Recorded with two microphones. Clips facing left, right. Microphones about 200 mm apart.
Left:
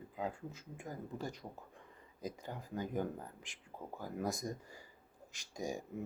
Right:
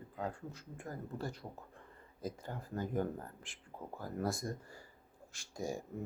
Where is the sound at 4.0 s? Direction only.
15° left (ahead or behind).